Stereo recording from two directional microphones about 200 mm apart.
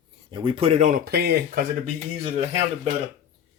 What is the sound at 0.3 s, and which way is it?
Speech, 25° right (ahead or behind).